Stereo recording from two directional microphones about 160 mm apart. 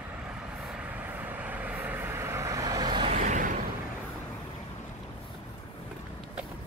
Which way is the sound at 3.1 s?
55° right (ahead or behind).